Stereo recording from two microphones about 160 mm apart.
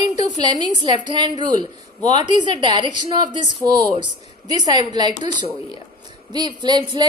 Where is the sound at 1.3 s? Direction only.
45° left (ahead or behind).